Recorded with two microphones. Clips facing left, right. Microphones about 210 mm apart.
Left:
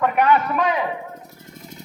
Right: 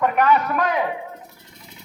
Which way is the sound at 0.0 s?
Centre (ahead or behind).